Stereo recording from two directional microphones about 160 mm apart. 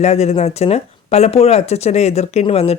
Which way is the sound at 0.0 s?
45° left (ahead or behind).